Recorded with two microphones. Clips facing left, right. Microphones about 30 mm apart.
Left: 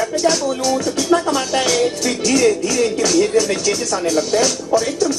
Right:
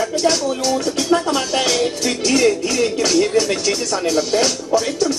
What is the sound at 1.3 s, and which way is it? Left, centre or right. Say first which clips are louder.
Music: left 1 dB; right.